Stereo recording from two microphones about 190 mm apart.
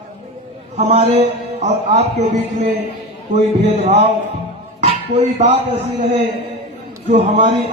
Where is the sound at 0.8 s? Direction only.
35° right (ahead or behind).